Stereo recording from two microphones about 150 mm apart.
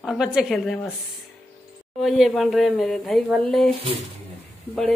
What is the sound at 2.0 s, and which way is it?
Speech, centre (ahead or behind).